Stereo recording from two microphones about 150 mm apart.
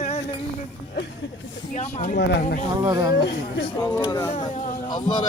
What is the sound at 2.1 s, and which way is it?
Speech, 90° left.